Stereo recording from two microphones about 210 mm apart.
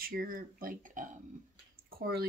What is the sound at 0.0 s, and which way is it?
Speech, 45° right (ahead or behind).